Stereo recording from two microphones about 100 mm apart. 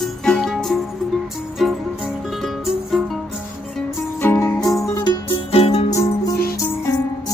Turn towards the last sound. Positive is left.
turn(degrees=35)  # may be behind; listen again after turning